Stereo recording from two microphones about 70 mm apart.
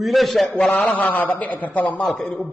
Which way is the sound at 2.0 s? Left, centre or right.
Centre.